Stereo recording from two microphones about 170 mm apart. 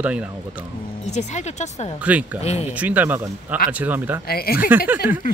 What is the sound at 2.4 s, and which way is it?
Speech, 40° left (ahead or behind).